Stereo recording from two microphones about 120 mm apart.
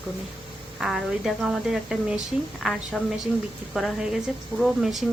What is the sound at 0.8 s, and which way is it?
A woman's voice, centre (ahead or behind).